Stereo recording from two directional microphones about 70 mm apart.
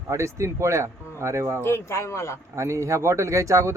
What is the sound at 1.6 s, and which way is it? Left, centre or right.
Speech, left.